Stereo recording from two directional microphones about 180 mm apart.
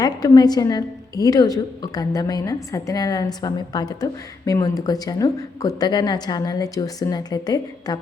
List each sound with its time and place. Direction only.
0.0 s a woman's voice: 20° left (ahead or behind)